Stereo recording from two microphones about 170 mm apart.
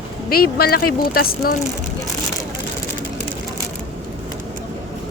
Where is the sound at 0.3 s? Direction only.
65° left (ahead or behind).